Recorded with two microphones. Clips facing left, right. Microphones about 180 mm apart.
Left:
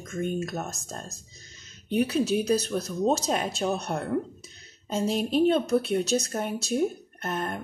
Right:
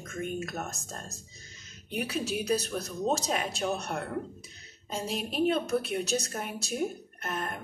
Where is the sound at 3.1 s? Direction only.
35° left (ahead or behind).